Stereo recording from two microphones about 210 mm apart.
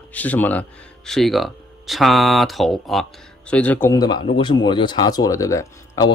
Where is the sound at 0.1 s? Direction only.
5° left (ahead or behind).